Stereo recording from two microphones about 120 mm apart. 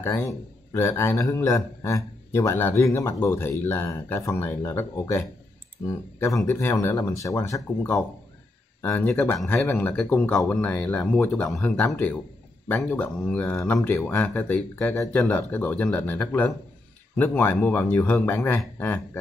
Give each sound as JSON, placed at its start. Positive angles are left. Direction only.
{"t": 0.0, "sound": "a man's voice", "side_deg": 25}
{"t": 8.8, "sound": "speech", "side_deg": 15}